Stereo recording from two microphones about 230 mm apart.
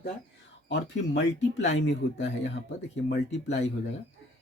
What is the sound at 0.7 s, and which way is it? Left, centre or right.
Speech, left.